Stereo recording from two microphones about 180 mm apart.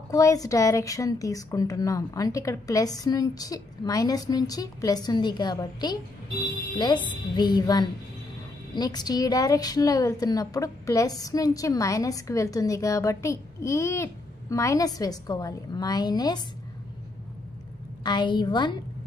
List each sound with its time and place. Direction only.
0.1 s a woman's voice: 20° left (ahead or behind)
18.0 s a woman's voice: 25° left (ahead or behind)